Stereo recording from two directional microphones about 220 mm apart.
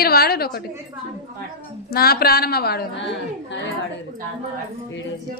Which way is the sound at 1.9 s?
45° left (ahead or behind).